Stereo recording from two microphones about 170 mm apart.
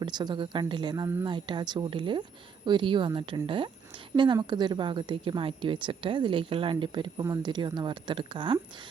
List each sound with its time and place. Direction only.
0.0 s a woman's voice: 25° right (ahead or behind)